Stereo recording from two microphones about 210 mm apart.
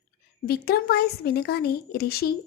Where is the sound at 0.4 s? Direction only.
45° left (ahead or behind).